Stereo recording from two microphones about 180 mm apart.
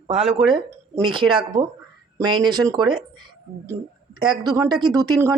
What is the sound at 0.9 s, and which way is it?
Speech, 25° right (ahead or behind).